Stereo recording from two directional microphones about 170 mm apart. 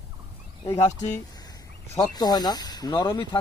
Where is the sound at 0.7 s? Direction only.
40° left (ahead or behind).